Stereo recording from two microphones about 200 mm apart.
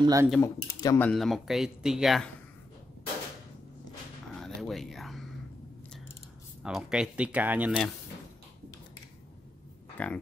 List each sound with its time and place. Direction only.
0.0 s speech: 15° right (ahead or behind)
0.4 s speech: 15° left (ahead or behind)
1.0 s speech: centre (ahead or behind)
4.4 s a sound: centre (ahead or behind)
6.6 s speech: 5° right (ahead or behind)
10.0 s speech: 10° left (ahead or behind)